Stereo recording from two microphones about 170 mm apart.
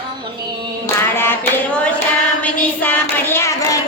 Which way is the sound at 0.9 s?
15° left (ahead or behind).